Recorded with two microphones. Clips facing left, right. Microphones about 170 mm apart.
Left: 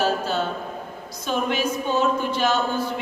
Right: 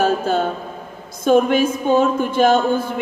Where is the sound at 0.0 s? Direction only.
50° right (ahead or behind).